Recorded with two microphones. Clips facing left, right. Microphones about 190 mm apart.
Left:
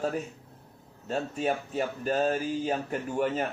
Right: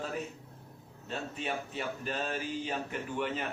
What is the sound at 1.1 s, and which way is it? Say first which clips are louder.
Speech: left 7 dB; 40° left (ahead or behind).